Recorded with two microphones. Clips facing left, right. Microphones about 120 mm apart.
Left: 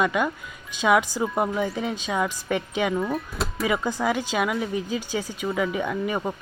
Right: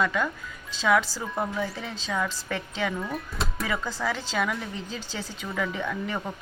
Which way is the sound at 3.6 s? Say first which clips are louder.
Left 6 dB; 15° left (ahead or behind).